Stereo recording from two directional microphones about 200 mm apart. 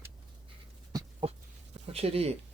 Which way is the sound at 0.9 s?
25° right (ahead or behind).